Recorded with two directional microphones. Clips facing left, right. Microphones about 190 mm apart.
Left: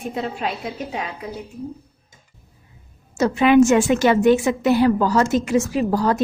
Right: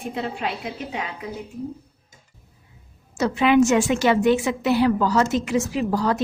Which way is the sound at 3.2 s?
45° left (ahead or behind).